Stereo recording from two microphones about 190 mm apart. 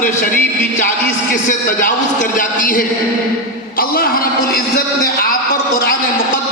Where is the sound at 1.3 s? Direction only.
40° left (ahead or behind).